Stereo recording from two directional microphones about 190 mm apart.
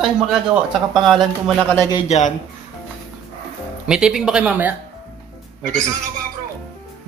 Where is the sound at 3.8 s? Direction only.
5° right (ahead or behind).